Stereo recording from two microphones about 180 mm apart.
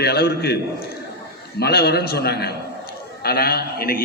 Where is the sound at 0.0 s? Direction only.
60° left (ahead or behind).